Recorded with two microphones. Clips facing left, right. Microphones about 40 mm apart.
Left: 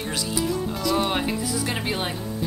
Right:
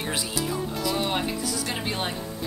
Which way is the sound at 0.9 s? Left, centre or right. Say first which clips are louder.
Left 5 dB; centre.